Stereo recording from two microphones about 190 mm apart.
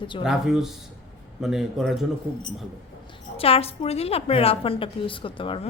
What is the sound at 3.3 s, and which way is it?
A woman's voice, 30° left (ahead or behind).